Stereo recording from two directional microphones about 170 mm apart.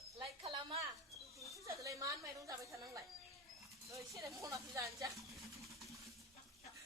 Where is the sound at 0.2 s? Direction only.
35° right (ahead or behind).